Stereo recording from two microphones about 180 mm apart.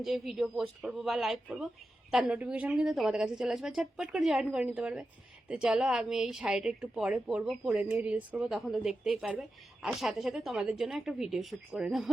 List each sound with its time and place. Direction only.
0.0 s a woman's voice: centre (ahead or behind)